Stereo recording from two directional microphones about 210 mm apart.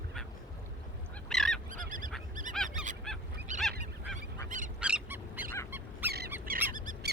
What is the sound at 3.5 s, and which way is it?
Goose, 35° right (ahead or behind).